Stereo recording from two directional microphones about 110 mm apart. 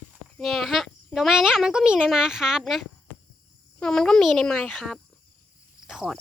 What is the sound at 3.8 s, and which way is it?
Speech, 5° left (ahead or behind).